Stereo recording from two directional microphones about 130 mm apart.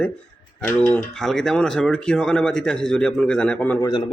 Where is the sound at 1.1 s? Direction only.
Centre (ahead or behind).